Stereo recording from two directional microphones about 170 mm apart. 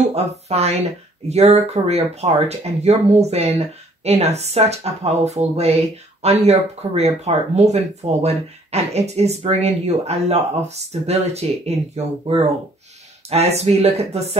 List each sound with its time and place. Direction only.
0.1 s speech: 40° right (ahead or behind)